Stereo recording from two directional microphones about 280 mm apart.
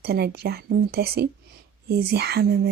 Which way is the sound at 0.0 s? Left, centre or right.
Right.